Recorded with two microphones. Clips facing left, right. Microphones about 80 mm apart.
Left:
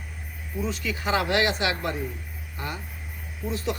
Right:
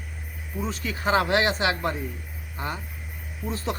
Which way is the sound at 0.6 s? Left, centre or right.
Right.